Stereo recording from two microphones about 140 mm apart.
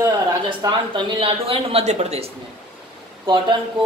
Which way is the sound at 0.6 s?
30° right (ahead or behind).